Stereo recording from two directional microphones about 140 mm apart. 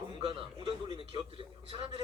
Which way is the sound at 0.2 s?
45° right (ahead or behind).